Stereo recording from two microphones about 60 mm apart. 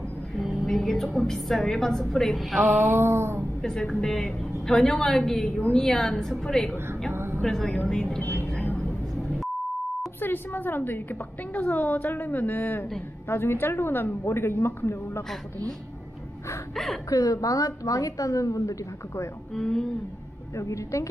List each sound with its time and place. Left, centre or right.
0.4 s a woman's voice: centre
2.9 s a sound: right
3.6 s a woman's voice: centre
7.1 s a sound: right
7.4 s a woman's voice: centre
8.2 s vehicle: left
10.2 s a woman's voice: left
16.7 s a woman's voice: centre
17.1 s a woman's voice: left
19.5 s a woman's voice: centre
20.5 s a woman's voice: left